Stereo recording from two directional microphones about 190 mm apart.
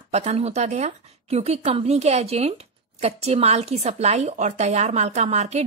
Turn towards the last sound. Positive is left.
turn(degrees=-35)  # may be behind; listen again after turning